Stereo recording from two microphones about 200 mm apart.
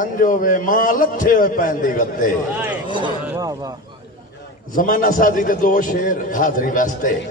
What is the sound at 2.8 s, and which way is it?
Speech, 25° right (ahead or behind).